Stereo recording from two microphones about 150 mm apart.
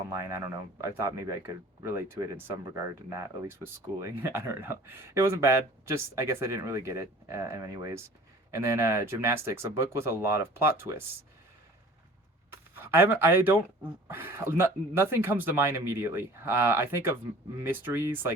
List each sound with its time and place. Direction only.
0.1 s speech: 20° right (ahead or behind)
12.5 s speech: 15° right (ahead or behind)